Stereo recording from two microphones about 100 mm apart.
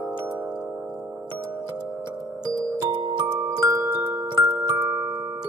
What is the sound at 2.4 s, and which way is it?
Music, 45° right (ahead or behind).